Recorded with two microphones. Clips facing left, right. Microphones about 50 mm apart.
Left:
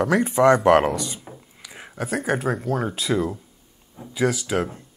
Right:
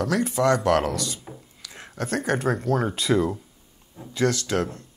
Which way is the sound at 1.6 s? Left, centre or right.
Centre.